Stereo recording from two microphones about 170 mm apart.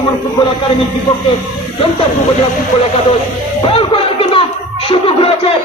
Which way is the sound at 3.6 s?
30° left (ahead or behind).